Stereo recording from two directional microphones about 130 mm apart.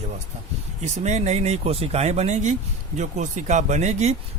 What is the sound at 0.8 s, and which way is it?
Speech, 60° right (ahead or behind).